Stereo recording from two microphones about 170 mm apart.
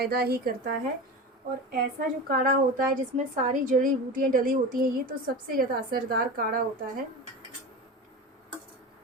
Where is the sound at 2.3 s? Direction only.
60° right (ahead or behind).